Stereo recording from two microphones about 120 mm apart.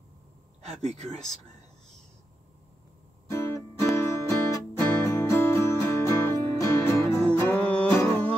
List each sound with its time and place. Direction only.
0.7 s speech: 65° right (ahead or behind)
3.3 s music: 25° left (ahead or behind)
7.2 s music: 10° left (ahead or behind)